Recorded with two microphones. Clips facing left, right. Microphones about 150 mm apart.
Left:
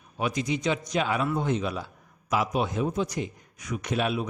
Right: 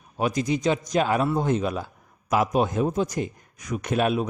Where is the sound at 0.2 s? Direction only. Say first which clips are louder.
Right 4 dB; 45° right (ahead or behind).